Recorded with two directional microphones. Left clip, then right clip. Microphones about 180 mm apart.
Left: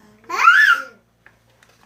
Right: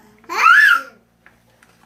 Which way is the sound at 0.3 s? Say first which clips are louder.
Even; 15° right (ahead or behind).